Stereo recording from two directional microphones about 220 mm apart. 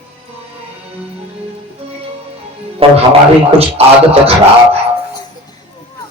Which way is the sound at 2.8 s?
25° right (ahead or behind).